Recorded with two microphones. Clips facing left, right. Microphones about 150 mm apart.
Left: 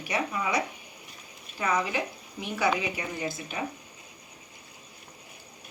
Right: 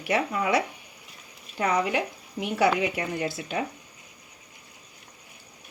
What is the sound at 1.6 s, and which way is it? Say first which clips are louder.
Speech: right 3 dB; 65° right (ahead or behind).